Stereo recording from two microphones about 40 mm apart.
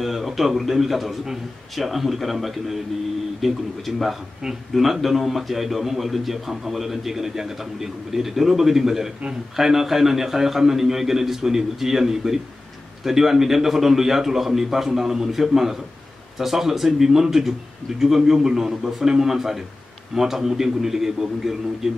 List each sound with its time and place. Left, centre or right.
0.0 s a man's voice: centre